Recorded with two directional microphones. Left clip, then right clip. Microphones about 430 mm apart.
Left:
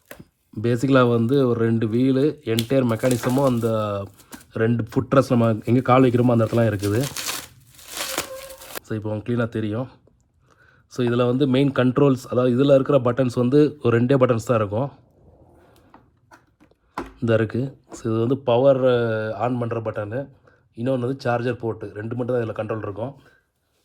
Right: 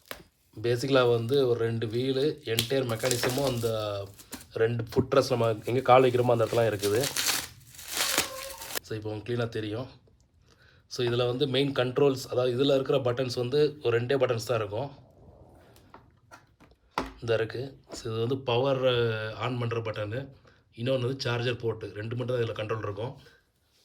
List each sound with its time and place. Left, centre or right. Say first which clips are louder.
0.6 s speech: left 6 dB; centre
7.2 s crumpling: right 1 dB; centre
8.8 s speech: left 10 dB; centre
17.2 s speech: left 9 dB; centre